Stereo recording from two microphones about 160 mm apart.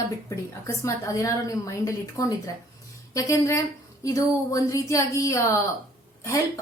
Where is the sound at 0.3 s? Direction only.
20° left (ahead or behind).